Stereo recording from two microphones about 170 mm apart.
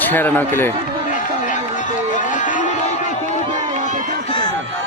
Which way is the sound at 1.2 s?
50° left (ahead or behind).